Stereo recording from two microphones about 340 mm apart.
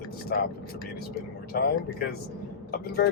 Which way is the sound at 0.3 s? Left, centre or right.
Left.